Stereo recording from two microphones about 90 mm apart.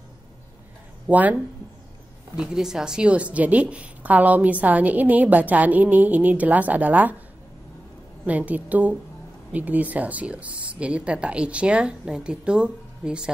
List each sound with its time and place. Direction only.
1.0 s a woman's voice: 15° right (ahead or behind)
8.3 s a woman's voice: 15° right (ahead or behind)